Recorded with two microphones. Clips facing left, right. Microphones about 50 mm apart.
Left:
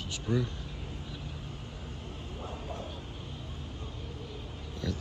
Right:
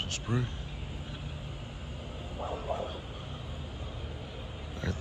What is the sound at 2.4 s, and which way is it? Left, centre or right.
Vehicle, centre.